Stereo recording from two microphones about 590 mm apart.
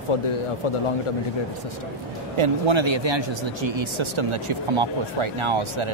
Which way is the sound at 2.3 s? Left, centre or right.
Right.